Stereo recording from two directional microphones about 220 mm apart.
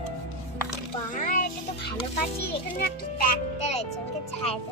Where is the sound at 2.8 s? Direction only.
40° left (ahead or behind).